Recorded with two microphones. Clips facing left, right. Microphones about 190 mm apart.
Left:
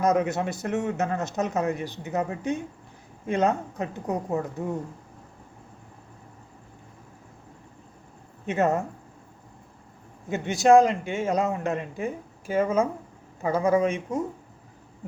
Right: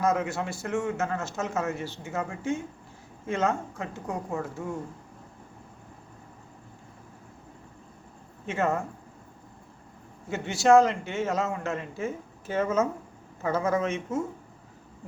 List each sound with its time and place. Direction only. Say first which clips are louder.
0.0 s a man's voice: left 4 dB; 20° left (ahead or behind)
8.4 s a man's voice: left 4 dB; 20° left (ahead or behind)
10.2 s speech: left 2 dB; 15° left (ahead or behind)